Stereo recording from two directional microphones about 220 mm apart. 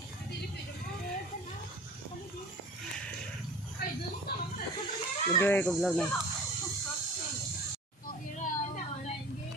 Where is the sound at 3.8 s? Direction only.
45° left (ahead or behind).